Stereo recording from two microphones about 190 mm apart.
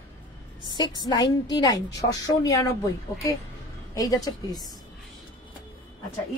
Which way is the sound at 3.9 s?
20° left (ahead or behind).